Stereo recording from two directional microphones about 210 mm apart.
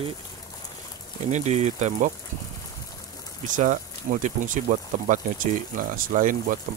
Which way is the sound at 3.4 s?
35° right (ahead or behind).